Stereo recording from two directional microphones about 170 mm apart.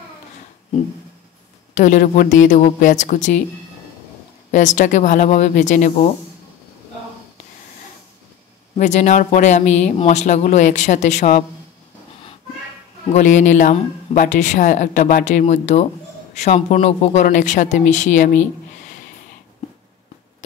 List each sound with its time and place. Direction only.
1.8 s speech: 50° left (ahead or behind)
4.5 s speech: 45° left (ahead or behind)
8.7 s speech: 45° left (ahead or behind)
13.1 s speech: 45° left (ahead or behind)